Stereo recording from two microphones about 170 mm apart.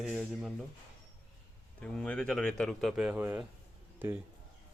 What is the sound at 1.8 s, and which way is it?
A man's voice, 5° left (ahead or behind).